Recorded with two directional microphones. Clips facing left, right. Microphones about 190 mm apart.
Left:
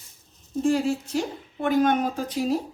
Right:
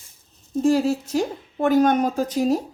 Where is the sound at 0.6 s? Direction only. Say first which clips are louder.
Right 4 dB; 40° right (ahead or behind).